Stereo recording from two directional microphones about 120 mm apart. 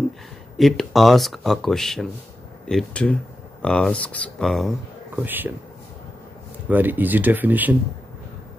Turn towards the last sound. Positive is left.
turn(degrees=-15)  # may be behind; listen again after turning